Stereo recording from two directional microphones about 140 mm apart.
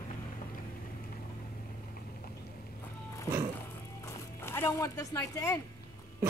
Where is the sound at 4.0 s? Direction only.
20° left (ahead or behind).